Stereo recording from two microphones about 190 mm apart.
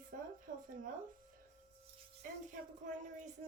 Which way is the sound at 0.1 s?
50° right (ahead or behind).